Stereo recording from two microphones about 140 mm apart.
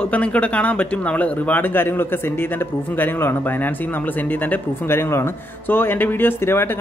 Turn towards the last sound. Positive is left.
turn(degrees=15)  # may be behind; listen again after turning